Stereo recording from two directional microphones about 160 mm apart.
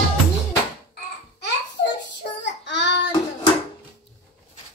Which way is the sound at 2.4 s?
90° left.